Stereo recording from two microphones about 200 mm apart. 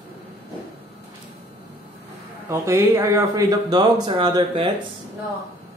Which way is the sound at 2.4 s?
15° right (ahead or behind).